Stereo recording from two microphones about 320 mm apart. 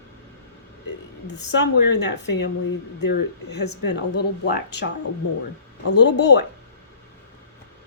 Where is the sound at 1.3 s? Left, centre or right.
Left.